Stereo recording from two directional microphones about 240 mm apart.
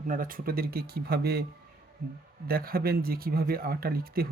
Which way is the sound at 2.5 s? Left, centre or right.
Right.